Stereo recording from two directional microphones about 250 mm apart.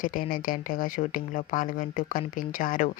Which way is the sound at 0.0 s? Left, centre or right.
Left.